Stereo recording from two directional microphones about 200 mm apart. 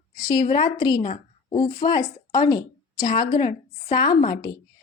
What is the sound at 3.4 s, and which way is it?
Speech, 40° left (ahead or behind).